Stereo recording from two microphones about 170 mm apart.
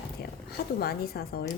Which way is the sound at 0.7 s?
65° left (ahead or behind).